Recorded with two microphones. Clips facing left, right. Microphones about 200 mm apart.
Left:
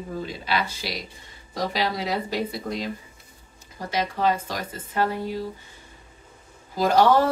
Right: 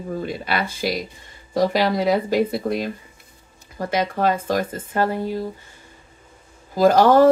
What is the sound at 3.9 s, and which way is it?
Speech, 55° right (ahead or behind).